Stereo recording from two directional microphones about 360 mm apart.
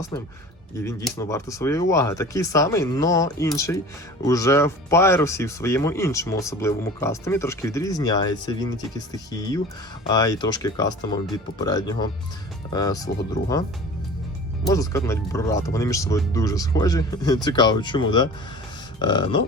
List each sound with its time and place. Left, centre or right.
0.1 s speech: centre
10.1 s speech: centre
13.4 s speech: left
14.7 s speech: centre